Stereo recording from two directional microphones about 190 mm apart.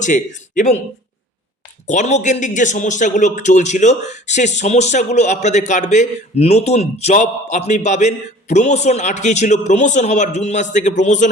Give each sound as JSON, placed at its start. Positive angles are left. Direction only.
{"t": 0.0, "sound": "speech", "side_deg": 40}
{"t": 1.9, "sound": "a man's voice", "side_deg": 40}